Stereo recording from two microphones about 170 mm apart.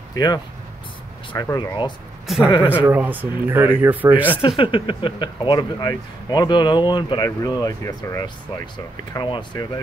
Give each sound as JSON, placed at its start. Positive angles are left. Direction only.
{"t": 0.1, "sound": "speech", "side_deg": 25}
{"t": 2.2, "sound": "speech", "side_deg": 0}
{"t": 4.6, "sound": "speech", "side_deg": 30}